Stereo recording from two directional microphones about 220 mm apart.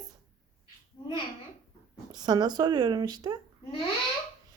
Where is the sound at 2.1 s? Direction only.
20° right (ahead or behind).